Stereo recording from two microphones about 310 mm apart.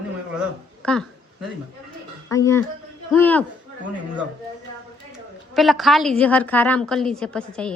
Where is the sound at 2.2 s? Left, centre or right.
Centre.